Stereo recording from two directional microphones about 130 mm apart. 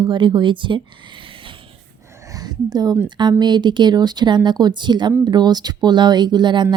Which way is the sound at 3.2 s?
35° right (ahead or behind).